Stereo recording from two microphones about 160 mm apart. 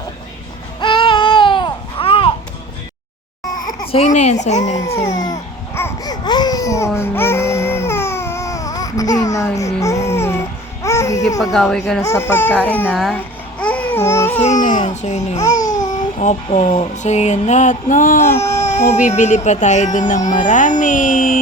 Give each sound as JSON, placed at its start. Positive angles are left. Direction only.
{"t": 0.8, "sound": "baby cry", "side_deg": 30}
{"t": 3.9, "sound": "speech", "side_deg": 45}
{"t": 5.1, "sound": "babbling", "side_deg": 25}
{"t": 9.8, "sound": "a sound", "side_deg": 20}
{"t": 10.8, "sound": "babbling", "side_deg": 20}
{"t": 11.3, "sound": "speech", "side_deg": 0}
{"t": 12.0, "sound": "speech", "side_deg": 15}
{"t": 12.9, "sound": "speech", "side_deg": 0}
{"t": 13.1, "sound": "babbling", "side_deg": 10}
{"t": 14.4, "sound": "speech", "side_deg": 50}
{"t": 15.4, "sound": "babbling", "side_deg": 20}
{"t": 15.8, "sound": "speech", "side_deg": 50}
{"t": 18.6, "sound": "speech", "side_deg": 45}